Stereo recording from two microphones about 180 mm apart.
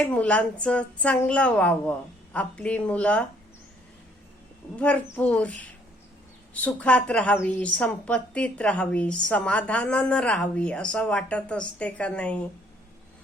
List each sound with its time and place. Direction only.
0.0 s a woman's voice: 5° left (ahead or behind)
4.8 s a woman's voice: 10° left (ahead or behind)